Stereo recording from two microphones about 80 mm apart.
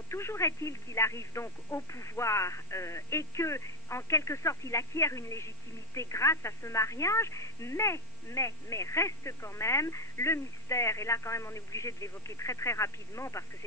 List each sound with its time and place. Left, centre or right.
0.1 s a woman's voice: left